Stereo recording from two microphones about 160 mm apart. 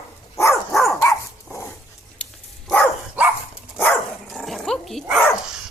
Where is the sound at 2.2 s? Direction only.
5° left (ahead or behind).